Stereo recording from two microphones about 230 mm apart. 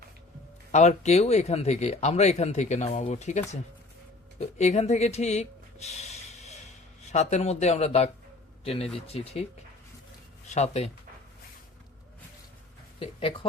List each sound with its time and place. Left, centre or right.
0.7 s speech: left
10.5 s speech: left
13.0 s speech: left